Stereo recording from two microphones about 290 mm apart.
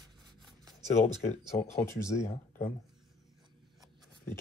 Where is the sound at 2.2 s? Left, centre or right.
Left.